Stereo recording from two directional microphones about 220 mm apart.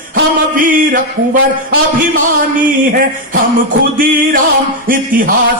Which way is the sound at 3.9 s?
40° right (ahead or behind).